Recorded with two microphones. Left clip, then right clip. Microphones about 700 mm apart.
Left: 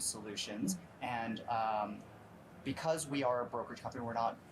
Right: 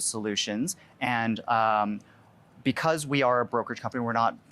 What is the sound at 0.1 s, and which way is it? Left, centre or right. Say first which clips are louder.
Speech: right 13 dB; right.